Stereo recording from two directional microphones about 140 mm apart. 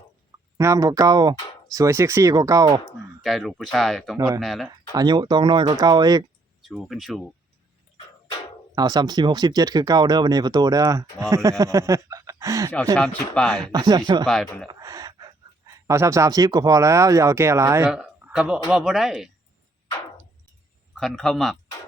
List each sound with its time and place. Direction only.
0.5 s speech: 25° right (ahead or behind)
3.2 s speech: centre (ahead or behind)
4.9 s speech: 30° right (ahead or behind)
6.6 s speech: centre (ahead or behind)
8.7 s speech: 30° right (ahead or behind)
13.0 s speech: 5° left (ahead or behind)
13.6 s speech: 30° right (ahead or behind)
14.3 s speech: 5° left (ahead or behind)
14.7 s speech: 25° right (ahead or behind)
18.2 s a sound: 10° right (ahead or behind)
18.7 s speech: 5° right (ahead or behind)
20.9 s speech: 5° left (ahead or behind)